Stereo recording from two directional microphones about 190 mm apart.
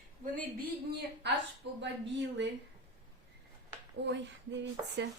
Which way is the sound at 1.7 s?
70° right (ahead or behind).